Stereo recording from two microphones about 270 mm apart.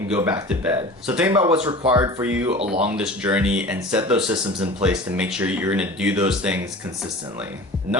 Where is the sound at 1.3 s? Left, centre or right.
Centre.